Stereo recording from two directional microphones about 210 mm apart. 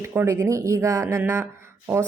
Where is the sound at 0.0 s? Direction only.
10° right (ahead or behind).